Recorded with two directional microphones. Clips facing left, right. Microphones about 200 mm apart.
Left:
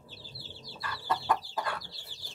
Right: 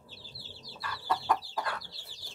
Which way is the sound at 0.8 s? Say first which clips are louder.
Even; centre (ahead or behind).